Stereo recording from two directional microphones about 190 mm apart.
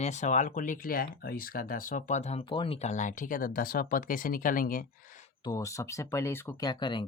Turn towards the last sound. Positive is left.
turn(degrees=25)  # may be behind; listen again after turning